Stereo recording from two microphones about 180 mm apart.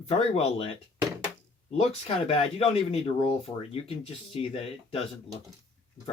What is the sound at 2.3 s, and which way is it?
Speech, 35° left (ahead or behind).